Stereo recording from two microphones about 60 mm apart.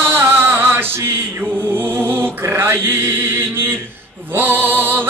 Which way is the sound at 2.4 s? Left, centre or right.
Right.